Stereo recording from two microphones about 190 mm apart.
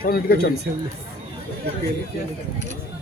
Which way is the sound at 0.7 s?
70° right (ahead or behind).